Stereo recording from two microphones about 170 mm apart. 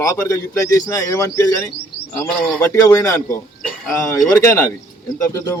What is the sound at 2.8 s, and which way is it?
A man's voice, 20° left (ahead or behind).